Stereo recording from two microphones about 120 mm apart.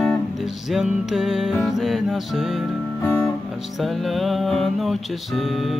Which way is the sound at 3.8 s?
Centre (ahead or behind).